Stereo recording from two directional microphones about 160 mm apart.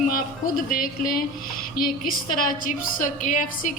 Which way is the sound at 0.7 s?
60° left (ahead or behind).